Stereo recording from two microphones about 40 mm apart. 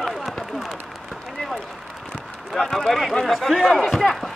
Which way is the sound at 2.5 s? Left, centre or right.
Centre.